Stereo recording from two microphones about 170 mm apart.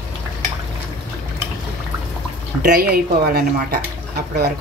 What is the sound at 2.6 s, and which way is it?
A woman's voice, 60° right (ahead or behind).